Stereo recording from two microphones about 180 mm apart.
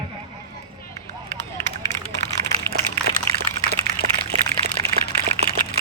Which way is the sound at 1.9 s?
40° left (ahead or behind).